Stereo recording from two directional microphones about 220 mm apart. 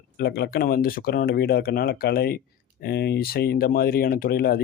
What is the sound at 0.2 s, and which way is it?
Speech, 45° left (ahead or behind).